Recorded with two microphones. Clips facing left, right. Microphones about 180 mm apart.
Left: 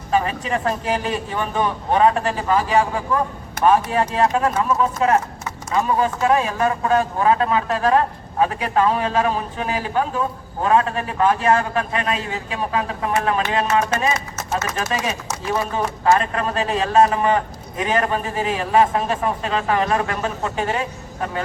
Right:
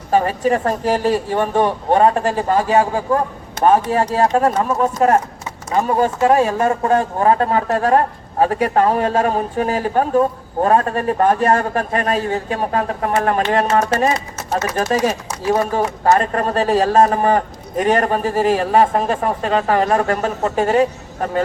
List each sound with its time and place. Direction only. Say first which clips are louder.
0.1 s speech: right 5 dB; 40° right (ahead or behind)